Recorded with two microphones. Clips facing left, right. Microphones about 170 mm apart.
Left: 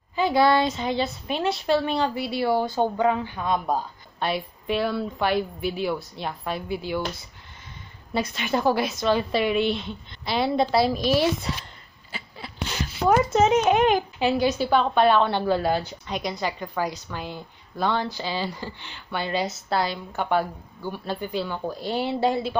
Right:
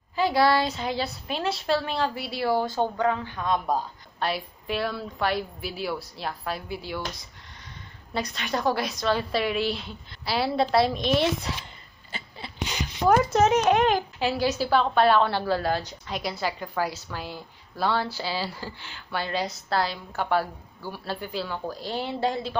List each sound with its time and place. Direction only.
0.1 s a woman's voice: centre (ahead or behind)
2.8 s a woman's voice: 15° left (ahead or behind)
8.1 s a woman's voice: 5° left (ahead or behind)
13.1 s a woman's voice: centre (ahead or behind)
15.3 s a woman's voice: 20° left (ahead or behind)
16.1 s a woman's voice: 5° right (ahead or behind)